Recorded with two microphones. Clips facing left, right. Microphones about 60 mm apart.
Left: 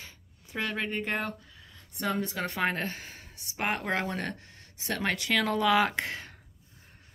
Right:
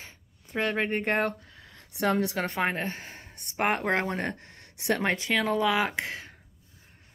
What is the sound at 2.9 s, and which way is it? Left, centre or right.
Speech, right.